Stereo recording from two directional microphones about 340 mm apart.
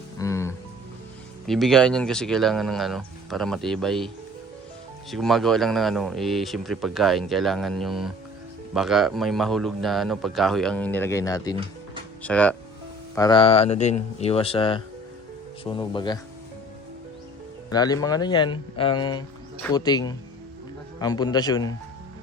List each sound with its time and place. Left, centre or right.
0.2 s music: centre
1.5 s speech: centre
5.1 s speech: centre
11.5 s music: centre
12.2 s speech: centre
17.7 s speech: centre